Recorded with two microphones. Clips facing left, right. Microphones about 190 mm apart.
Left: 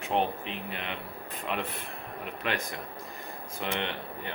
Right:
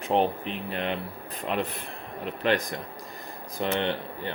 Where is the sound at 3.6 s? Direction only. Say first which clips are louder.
Right 6 dB; 35° right (ahead or behind).